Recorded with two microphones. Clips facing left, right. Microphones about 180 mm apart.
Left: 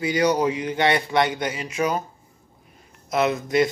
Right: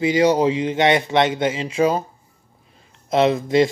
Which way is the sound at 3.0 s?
30° right (ahead or behind).